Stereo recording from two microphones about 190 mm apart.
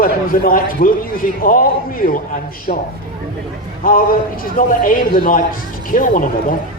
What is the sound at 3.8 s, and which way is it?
A man's voice, 50° left (ahead or behind).